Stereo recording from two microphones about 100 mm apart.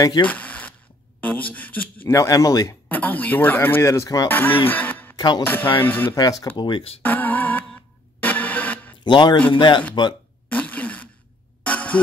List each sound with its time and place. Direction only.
0.0 s a man's voice: 45° left (ahead or behind)
0.3 s a sound: 15° left (ahead or behind)
1.2 s speech: 15° left (ahead or behind)
2.0 s speech: 35° left (ahead or behind)
2.9 s speech: 15° left (ahead or behind); by 4.3 s 35° left (ahead or behind)
4.3 s speech: 20° left (ahead or behind)
5.1 s music: 45° left (ahead or behind)
5.4 s speech: 20° left (ahead or behind)
6.4 s speech: 50° left (ahead or behind)
7.0 s music: 15° left (ahead or behind)
9.0 s a man's voice: 50° left (ahead or behind)
10.5 s a sound: 15° left (ahead or behind)
11.6 s music: 15° left (ahead or behind)